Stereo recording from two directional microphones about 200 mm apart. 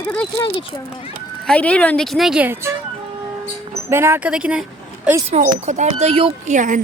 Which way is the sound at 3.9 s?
10° right (ahead or behind).